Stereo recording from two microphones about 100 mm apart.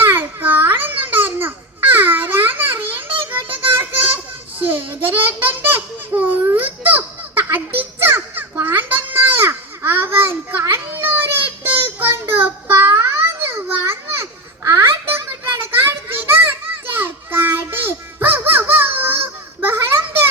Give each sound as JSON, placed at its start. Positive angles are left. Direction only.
{"t": 0.0, "sound": "babbling", "side_deg": -20}
{"t": 3.3, "sound": "child singing", "side_deg": -20}
{"t": 4.6, "sound": "a sound", "side_deg": -20}
{"t": 7.8, "sound": "children playing", "side_deg": -25}